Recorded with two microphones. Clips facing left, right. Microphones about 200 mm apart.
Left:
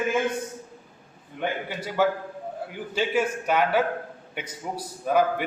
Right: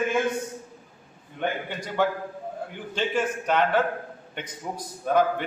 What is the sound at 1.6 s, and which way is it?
A man's voice, 5° left (ahead or behind).